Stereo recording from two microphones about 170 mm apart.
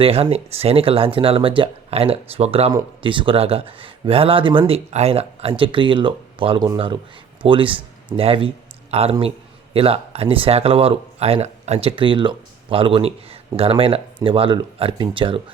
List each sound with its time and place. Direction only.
0.0 s speech: 35° right (ahead or behind)